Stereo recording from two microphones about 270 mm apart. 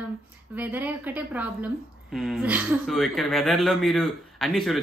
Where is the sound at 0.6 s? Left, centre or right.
Centre.